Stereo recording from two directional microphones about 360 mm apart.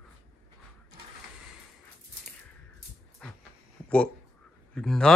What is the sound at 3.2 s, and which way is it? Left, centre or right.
Dog, centre.